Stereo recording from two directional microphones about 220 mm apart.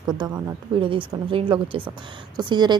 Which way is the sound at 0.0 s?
20° right (ahead or behind).